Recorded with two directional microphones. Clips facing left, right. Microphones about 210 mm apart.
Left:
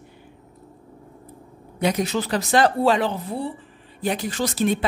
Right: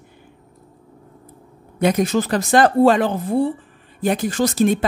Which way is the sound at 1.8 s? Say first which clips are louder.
Right 5 dB; 50° right (ahead or behind).